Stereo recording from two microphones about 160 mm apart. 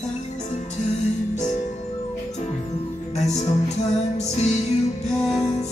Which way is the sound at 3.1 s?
45° left (ahead or behind).